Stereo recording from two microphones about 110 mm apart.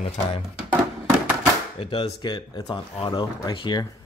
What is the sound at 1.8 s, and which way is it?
Speech, 50° left (ahead or behind).